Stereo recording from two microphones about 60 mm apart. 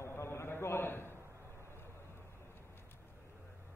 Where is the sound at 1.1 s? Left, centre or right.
Right.